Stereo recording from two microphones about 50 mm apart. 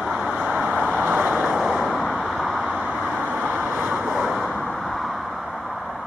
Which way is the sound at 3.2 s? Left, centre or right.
Right.